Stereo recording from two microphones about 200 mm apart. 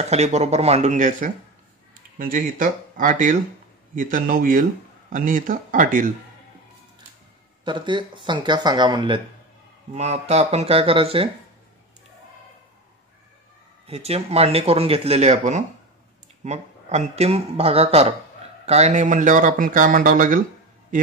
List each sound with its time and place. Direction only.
0.1 s speech: 35° right (ahead or behind)
7.6 s speech: 25° right (ahead or behind)
9.9 s speech: 35° right (ahead or behind)
13.8 s speech: 30° right (ahead or behind)